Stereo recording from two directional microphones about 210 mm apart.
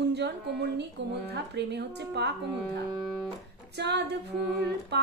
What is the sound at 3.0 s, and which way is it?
Music, centre (ahead or behind).